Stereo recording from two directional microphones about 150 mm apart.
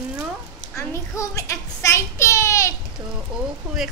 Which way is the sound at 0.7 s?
20° left (ahead or behind).